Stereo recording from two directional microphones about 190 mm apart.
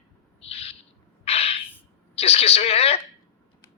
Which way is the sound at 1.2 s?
30° left (ahead or behind).